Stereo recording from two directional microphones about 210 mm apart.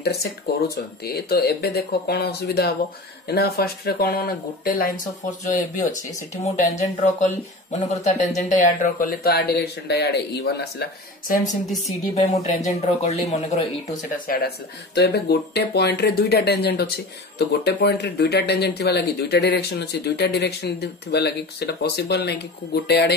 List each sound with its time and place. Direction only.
0.0 s speech: 50° left (ahead or behind)
12.2 s speech: 30° left (ahead or behind); by 23.1 s 50° left (ahead or behind)